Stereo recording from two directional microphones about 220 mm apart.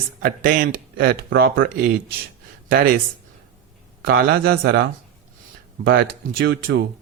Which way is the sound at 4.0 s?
45° right (ahead or behind).